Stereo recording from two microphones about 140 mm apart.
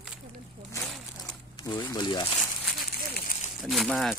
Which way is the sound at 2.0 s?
30° left (ahead or behind).